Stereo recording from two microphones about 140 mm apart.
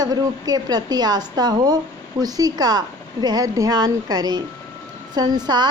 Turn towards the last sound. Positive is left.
turn(degrees=-30)  # may be behind; listen again after turning